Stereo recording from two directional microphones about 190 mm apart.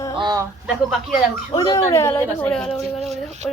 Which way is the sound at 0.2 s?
20° right (ahead or behind).